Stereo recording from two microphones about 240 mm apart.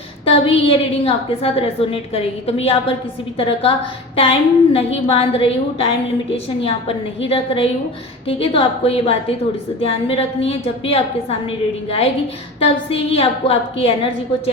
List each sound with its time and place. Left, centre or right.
0.3 s a woman's voice: left
12.5 s a woman's voice: left